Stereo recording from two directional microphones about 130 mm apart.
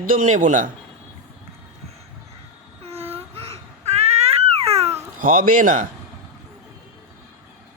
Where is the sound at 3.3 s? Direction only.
50° right (ahead or behind).